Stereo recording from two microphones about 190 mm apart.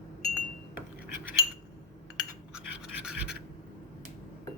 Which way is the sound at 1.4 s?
20° right (ahead or behind).